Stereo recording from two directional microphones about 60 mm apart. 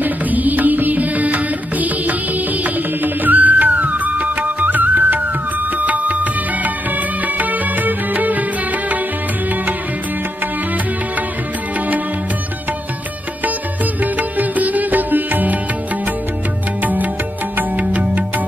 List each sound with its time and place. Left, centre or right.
0.0 s music: right
14.1 s music: right
16.8 s music: right